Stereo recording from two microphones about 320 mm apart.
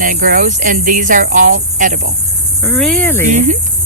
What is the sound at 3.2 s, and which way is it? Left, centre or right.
Speech, right.